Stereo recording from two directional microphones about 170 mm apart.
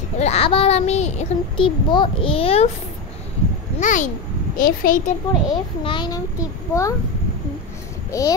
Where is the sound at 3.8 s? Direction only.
45° left (ahead or behind).